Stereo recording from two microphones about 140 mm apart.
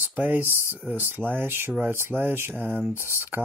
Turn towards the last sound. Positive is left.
turn(degrees=-15)  # may be behind; listen again after turning